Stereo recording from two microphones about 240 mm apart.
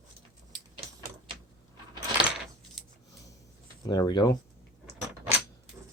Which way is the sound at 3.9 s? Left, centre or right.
Centre.